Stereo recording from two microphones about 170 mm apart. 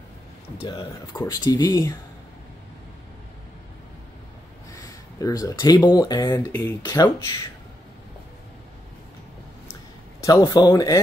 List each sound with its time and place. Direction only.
0.6 s speech: 25° left (ahead or behind)
4.7 s a sound: 20° left (ahead or behind)
5.9 s speech: 20° left (ahead or behind)
6.5 s speech: 10° left (ahead or behind)
10.2 s speech: 20° left (ahead or behind)